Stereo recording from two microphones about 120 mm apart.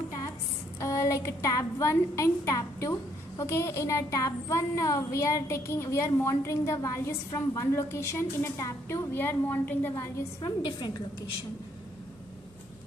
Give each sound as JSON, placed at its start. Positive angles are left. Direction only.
{"t": 0.7, "sound": "a woman's voice", "side_deg": 25}
{"t": 10.4, "sound": "a woman's voice", "side_deg": 35}